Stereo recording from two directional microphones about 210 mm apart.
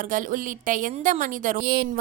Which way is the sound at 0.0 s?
40° right (ahead or behind).